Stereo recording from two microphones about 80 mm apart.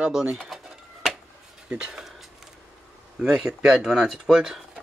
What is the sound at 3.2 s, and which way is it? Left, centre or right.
Speech, centre.